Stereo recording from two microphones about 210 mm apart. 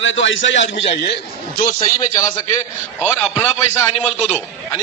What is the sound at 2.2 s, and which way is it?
Speech, 15° left (ahead or behind).